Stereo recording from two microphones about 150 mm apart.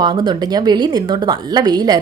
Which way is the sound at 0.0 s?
30° right (ahead or behind).